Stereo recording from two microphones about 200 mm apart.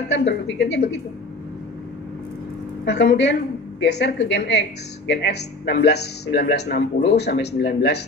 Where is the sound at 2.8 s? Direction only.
60° left (ahead or behind).